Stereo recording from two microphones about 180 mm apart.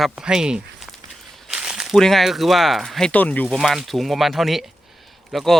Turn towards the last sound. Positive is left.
turn(degrees=0)  # may be behind; listen again after turning